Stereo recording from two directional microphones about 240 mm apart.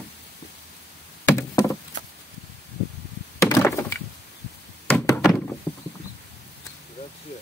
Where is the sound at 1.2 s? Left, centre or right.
Centre.